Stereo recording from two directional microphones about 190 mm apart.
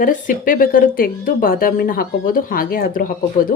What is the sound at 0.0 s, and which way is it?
Speech, 45° left (ahead or behind).